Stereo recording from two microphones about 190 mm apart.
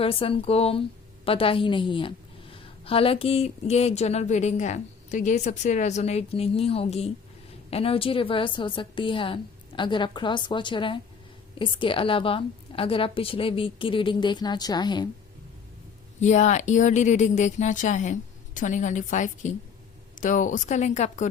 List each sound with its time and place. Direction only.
0.0 s a woman's voice: 30° left (ahead or behind)
16.2 s a woman's voice: 40° left (ahead or behind)